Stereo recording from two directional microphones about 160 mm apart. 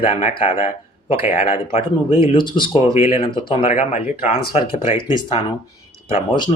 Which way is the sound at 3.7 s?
50° left (ahead or behind).